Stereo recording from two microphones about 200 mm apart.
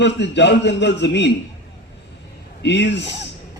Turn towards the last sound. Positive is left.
turn(degrees=60)  # may be behind; listen again after turning